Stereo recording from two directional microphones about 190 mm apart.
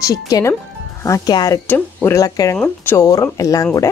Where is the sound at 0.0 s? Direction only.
15° left (ahead or behind).